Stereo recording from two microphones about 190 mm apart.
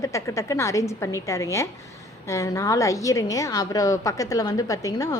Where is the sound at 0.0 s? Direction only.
15° left (ahead or behind).